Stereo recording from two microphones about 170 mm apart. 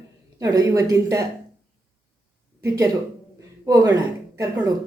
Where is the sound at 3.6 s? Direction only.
20° right (ahead or behind).